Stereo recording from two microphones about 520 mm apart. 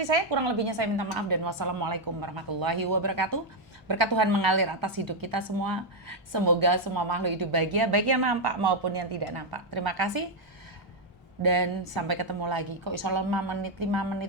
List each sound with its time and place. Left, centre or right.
0.0 s a woman's voice: right
11.4 s a woman's voice: right